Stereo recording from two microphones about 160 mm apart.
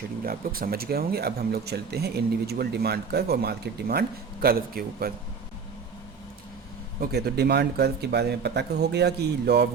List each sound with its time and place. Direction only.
0.3 s speech: 65° right (ahead or behind)
7.0 s speech: 85° right